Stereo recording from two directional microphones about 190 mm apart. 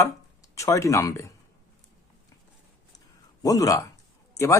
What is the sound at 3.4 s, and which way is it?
Speech, 20° left (ahead or behind).